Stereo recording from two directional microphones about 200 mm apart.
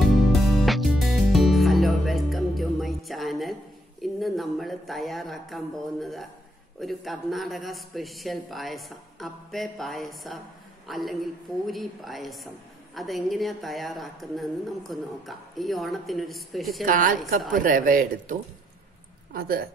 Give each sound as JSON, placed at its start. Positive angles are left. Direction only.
{"t": 0.0, "sound": "music", "side_deg": 0}
{"t": 4.0, "sound": "a woman's voice", "side_deg": 0}
{"t": 16.8, "sound": "speech", "side_deg": -40}